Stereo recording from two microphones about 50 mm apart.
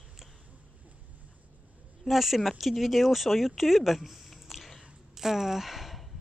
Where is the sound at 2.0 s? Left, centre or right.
Centre.